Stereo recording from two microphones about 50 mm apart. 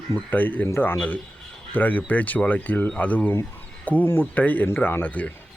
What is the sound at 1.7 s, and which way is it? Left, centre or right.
Speech, left.